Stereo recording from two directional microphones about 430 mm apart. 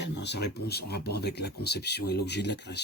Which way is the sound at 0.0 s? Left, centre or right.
Left.